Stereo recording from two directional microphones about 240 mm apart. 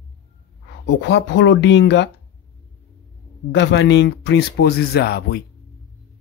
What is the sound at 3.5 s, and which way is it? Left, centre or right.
Speech, left.